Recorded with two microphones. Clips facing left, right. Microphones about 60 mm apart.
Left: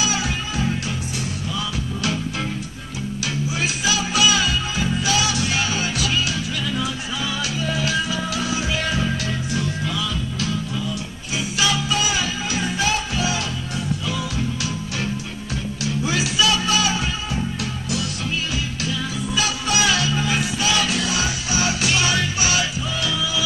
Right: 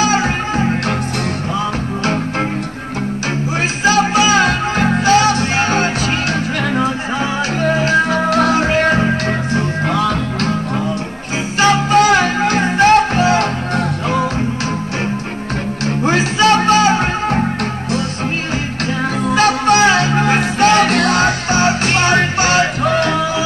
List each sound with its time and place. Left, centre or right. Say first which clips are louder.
0.0 s music: right 9 dB; right
3.8 s music: right 9 dB; right
11.6 s music: right 12 dB; right
15.8 s music: right 8 dB; right
19.2 s music: right 13 dB; right